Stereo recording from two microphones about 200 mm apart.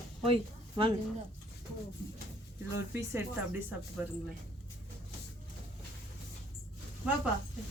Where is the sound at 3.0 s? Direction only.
10° right (ahead or behind).